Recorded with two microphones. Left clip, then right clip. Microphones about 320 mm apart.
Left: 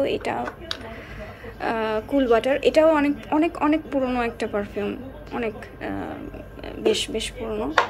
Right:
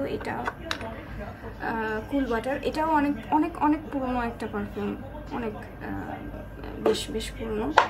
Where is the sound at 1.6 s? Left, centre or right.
Centre.